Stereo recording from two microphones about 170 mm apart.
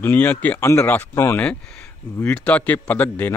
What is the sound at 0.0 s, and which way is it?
Speech, 10° left (ahead or behind).